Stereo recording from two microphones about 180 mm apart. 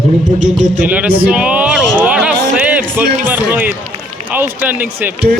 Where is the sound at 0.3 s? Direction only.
40° right (ahead or behind).